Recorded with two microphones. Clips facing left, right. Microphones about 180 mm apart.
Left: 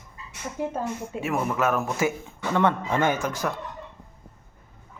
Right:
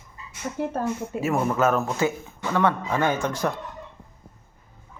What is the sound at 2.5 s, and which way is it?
Speech, 20° left (ahead or behind).